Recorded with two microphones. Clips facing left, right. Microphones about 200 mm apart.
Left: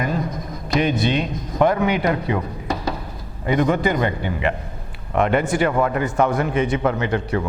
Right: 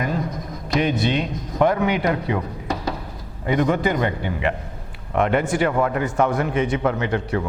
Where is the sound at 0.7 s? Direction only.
15° left (ahead or behind).